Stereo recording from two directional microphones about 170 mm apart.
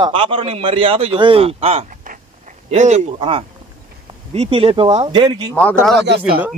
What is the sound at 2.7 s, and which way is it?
Speech, 40° right (ahead or behind).